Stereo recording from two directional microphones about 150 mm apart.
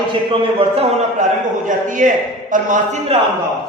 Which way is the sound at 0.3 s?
40° right (ahead or behind).